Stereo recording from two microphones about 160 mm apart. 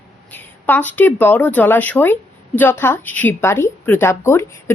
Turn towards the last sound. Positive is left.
turn(degrees=15)  # may be behind; listen again after turning